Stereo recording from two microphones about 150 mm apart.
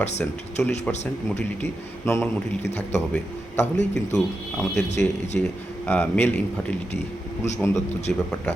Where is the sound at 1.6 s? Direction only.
15° left (ahead or behind).